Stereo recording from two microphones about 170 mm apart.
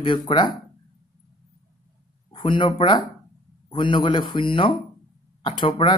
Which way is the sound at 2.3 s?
30° left (ahead or behind).